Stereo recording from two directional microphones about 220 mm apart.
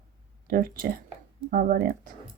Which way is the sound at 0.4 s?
40° right (ahead or behind).